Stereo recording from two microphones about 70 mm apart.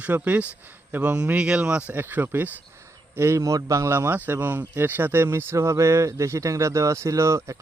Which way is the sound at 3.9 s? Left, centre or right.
Right.